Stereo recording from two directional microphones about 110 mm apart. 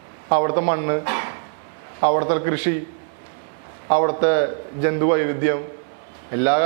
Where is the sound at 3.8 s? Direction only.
20° right (ahead or behind).